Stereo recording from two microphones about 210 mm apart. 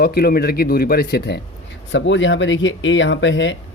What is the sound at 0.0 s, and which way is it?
Speech, 45° left (ahead or behind).